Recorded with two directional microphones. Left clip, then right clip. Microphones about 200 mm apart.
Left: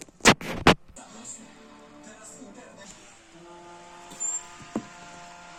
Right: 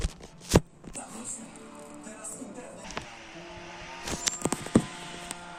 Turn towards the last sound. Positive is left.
turn(degrees=45)  # may be behind; listen again after turning